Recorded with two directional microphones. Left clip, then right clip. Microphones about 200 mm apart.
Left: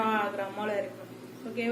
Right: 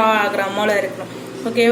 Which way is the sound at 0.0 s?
20° right (ahead or behind).